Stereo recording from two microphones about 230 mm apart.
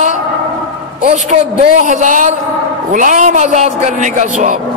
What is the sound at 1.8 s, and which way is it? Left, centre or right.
A man's voice, right.